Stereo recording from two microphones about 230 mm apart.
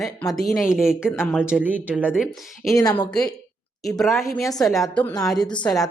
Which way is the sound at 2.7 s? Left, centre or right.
Centre.